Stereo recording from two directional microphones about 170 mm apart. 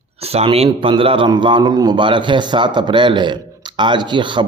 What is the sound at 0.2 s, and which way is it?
Speech, 35° right (ahead or behind).